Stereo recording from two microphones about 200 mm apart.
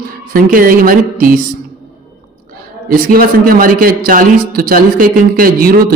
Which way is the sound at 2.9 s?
45° right (ahead or behind).